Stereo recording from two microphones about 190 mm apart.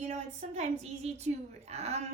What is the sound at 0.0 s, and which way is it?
A woman's voice, 35° right (ahead or behind).